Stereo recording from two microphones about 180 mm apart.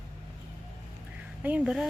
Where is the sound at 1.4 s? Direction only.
5° right (ahead or behind).